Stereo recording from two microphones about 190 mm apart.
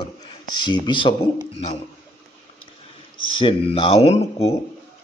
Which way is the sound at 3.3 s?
25° left (ahead or behind).